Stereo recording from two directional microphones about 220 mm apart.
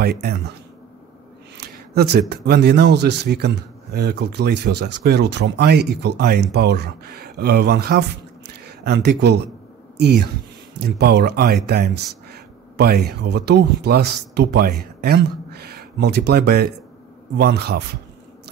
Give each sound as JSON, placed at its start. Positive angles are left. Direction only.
{"t": 0.0, "sound": "speech", "side_deg": -45}
{"t": 1.6, "sound": "speech", "side_deg": -45}